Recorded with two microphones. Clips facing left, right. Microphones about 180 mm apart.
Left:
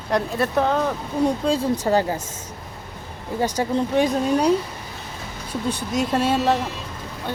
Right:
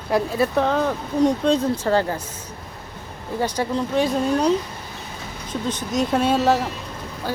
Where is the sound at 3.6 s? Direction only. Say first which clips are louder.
Even; 20° left (ahead or behind).